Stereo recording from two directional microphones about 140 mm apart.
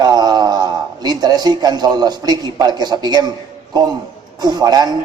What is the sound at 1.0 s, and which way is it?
A man's voice, 30° right (ahead or behind).